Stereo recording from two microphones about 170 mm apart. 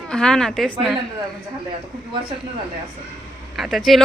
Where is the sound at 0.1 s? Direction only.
5° left (ahead or behind).